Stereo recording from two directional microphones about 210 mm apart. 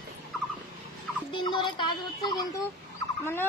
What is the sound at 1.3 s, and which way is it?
A child's voice, 20° left (ahead or behind).